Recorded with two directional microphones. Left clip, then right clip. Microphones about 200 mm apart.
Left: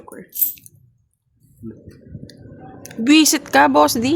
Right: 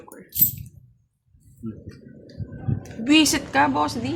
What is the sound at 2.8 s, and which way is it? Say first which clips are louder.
Speech: left 4 dB; 50° left (ahead or behind).